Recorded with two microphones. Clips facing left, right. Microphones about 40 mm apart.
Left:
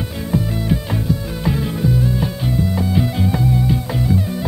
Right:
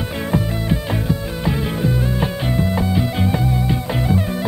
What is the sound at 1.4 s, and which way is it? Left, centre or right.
Music, centre.